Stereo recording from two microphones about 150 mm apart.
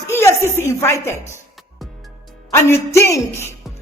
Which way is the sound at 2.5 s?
20° left (ahead or behind).